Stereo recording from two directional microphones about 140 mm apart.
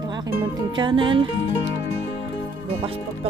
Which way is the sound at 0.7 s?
35° right (ahead or behind).